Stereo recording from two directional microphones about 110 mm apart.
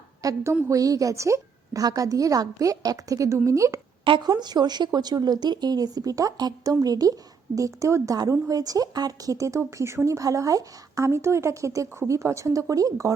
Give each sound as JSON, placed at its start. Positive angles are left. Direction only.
{"t": 0.2, "sound": "a woman's voice", "side_deg": -35}
{"t": 4.0, "sound": "speech", "side_deg": -50}